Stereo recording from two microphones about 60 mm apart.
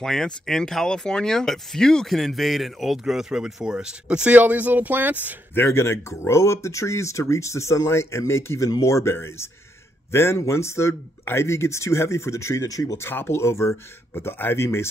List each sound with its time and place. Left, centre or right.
0.0 s a man's voice: centre; by 5.4 s right
5.5 s speech: left
8.6 s speech: left
10.1 s speech: left
12.9 s speech: left